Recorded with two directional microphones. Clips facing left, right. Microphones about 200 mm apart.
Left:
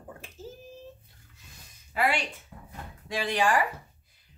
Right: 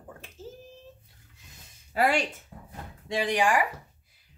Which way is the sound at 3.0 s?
20° right (ahead or behind).